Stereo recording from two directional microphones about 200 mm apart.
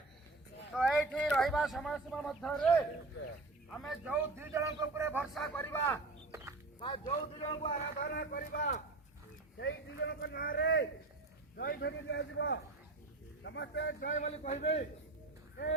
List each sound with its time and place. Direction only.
0.7 s a man's voice: centre (ahead or behind)
6.7 s a man's voice: 25° left (ahead or behind)
8.0 s speech: 50° left (ahead or behind)
9.6 s a man's voice: 60° left (ahead or behind); by 14.7 s 35° left (ahead or behind)